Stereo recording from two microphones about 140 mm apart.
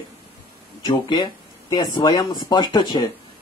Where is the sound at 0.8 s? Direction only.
30° left (ahead or behind).